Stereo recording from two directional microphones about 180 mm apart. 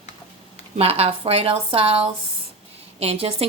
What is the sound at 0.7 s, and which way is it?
A woman's voice, 35° right (ahead or behind).